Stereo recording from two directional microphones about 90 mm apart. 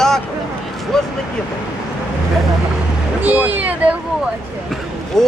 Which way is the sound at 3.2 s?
20° right (ahead or behind).